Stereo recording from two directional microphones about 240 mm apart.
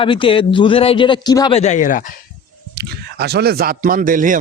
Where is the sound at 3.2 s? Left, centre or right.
Right.